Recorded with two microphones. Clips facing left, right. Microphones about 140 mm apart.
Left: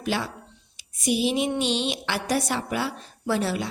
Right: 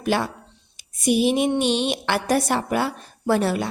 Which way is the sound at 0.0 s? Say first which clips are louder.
Right 5 dB; 55° right (ahead or behind).